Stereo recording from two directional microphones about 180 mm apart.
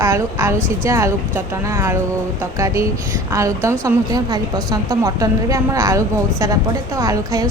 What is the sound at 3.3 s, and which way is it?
A woman's voice, 15° right (ahead or behind).